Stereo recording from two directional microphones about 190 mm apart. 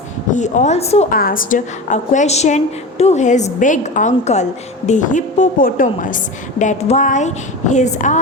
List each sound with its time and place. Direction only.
0.3 s a woman's voice: 40° left (ahead or behind)
1.1 s a woman's voice: 50° left (ahead or behind)